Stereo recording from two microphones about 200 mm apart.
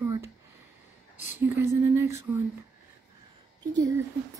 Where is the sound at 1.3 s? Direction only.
10° right (ahead or behind).